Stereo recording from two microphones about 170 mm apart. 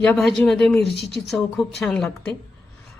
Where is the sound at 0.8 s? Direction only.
85° left.